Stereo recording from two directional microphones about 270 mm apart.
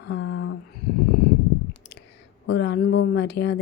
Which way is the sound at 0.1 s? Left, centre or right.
Left.